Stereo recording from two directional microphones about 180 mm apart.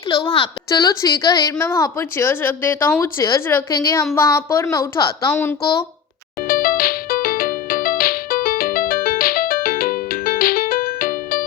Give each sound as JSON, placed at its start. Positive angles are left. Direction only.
{"t": 0.1, "sound": "a woman's voice", "side_deg": 30}
{"t": 6.5, "sound": "music", "side_deg": 55}